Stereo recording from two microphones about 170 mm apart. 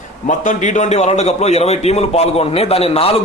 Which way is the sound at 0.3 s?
45° left (ahead or behind).